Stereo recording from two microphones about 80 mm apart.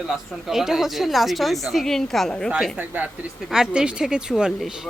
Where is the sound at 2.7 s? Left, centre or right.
Centre.